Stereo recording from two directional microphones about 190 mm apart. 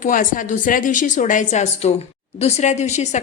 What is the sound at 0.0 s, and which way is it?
A woman's voice, 45° left (ahead or behind).